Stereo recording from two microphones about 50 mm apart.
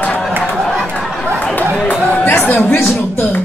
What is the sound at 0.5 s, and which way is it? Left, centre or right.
Chatter, centre.